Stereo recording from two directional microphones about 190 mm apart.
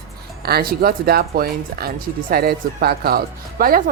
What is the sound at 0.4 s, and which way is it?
A woman's voice, 55° right (ahead or behind).